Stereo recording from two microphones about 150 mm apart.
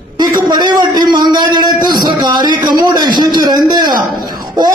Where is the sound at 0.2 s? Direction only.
30° right (ahead or behind).